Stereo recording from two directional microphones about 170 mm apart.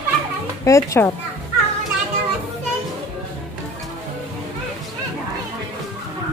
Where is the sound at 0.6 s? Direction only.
20° left (ahead or behind).